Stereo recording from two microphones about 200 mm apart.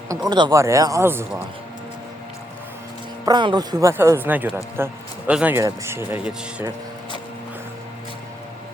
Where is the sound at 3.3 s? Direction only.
20° right (ahead or behind).